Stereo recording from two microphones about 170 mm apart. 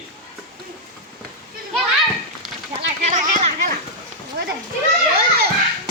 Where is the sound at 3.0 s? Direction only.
45° right (ahead or behind).